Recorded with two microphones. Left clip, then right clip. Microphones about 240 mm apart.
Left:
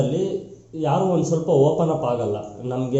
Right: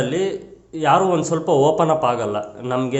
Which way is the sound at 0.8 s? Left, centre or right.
Right.